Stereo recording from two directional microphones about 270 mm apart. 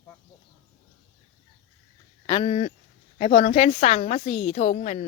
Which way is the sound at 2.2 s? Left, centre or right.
Left.